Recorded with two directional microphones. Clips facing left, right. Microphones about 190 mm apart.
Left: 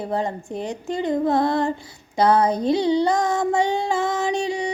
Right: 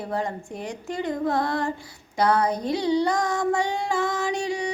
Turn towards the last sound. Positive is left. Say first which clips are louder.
# left 3 dB
turn(degrees=25)  # may be behind; listen again after turning